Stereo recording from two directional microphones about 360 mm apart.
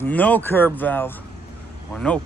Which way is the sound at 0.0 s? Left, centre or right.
Centre.